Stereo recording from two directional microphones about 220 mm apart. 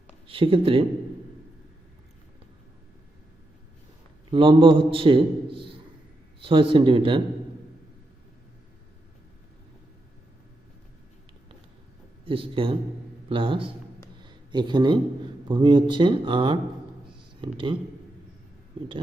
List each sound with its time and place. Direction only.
0.3 s a man's voice: 25° right (ahead or behind)
4.3 s a man's voice: 25° right (ahead or behind)
12.2 s a man's voice: 25° right (ahead or behind)
14.2 s a sound: 20° right (ahead or behind)
15.4 s a man's voice: 20° right (ahead or behind)